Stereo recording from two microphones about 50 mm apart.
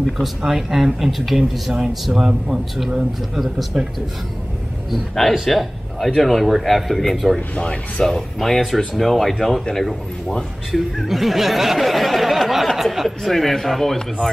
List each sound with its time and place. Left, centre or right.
0.2 s speech: centre
2.1 s speech: centre
4.9 s speech: centre
7.3 s speech: left
8.0 s speech: centre